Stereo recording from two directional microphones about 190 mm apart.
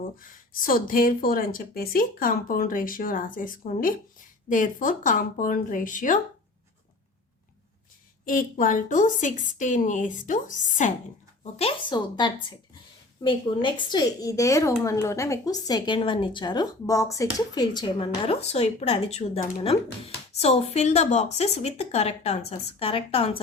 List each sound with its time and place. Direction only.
0.2 s speech: 45° left (ahead or behind)
8.2 s speech: 45° left (ahead or behind)
11.5 s speech: 30° left (ahead or behind)